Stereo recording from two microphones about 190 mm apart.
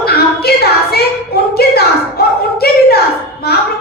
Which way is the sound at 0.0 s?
55° left (ahead or behind).